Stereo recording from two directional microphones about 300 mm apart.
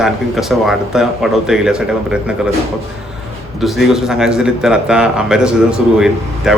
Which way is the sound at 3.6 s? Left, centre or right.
Centre.